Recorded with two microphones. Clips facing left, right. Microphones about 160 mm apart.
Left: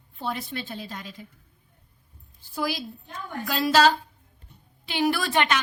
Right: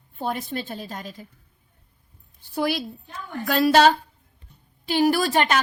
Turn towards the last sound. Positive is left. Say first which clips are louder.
# right 3 dB
turn(degrees=-40)  # may be behind; listen again after turning